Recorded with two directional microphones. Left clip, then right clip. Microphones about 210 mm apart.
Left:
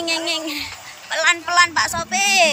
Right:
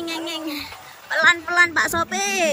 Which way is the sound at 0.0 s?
15° right (ahead or behind).